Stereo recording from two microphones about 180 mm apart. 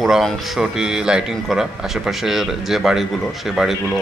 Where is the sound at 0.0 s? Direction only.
Centre (ahead or behind).